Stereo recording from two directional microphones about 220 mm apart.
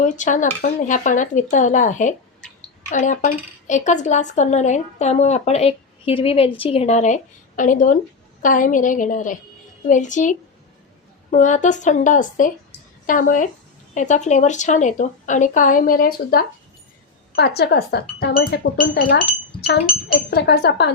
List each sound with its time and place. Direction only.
0.0 s speech: 35° left (ahead or behind)